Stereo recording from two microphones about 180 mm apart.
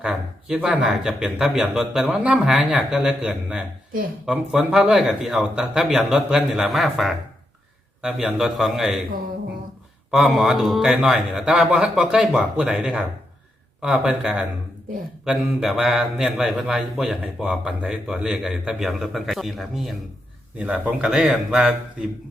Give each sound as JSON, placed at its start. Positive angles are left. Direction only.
{"t": 0.0, "sound": "a man's voice", "side_deg": -5}
{"t": 10.1, "sound": "a man's voice", "side_deg": 0}